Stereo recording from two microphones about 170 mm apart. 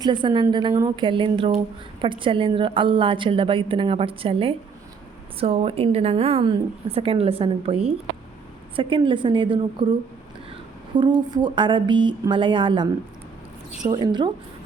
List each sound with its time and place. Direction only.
0.0 s a woman's voice: 30° right (ahead or behind)
13.9 s speech: 25° right (ahead or behind)